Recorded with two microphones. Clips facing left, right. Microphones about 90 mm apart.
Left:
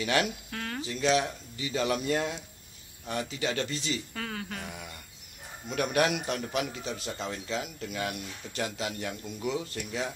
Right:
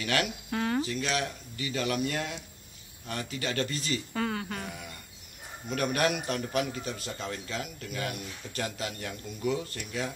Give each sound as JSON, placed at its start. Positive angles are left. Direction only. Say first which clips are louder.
{"t": 0.0, "sound": "a man's voice", "louder": "left 2 dB", "side_deg": 20}
{"t": 0.5, "sound": "speech", "louder": "right 7 dB", "side_deg": -10}
{"t": 1.0, "sound": "a man's voice", "louder": "left 5 dB", "side_deg": 25}
{"t": 3.1, "sound": "a man's voice", "louder": "left 2 dB", "side_deg": 10}
{"t": 4.1, "sound": "speech", "louder": "right 5 dB", "side_deg": -5}
{"t": 5.7, "sound": "a man's voice", "louder": "left 1 dB", "side_deg": 10}